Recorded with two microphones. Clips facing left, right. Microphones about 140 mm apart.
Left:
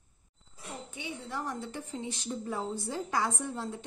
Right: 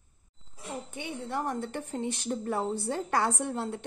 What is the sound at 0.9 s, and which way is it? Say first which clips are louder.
A woman's voice: right 4 dB; 55° right (ahead or behind).